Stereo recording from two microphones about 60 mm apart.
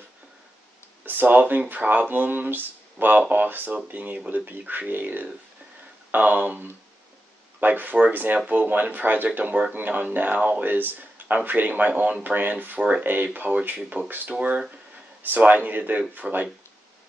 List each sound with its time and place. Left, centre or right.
1.0 s speech: right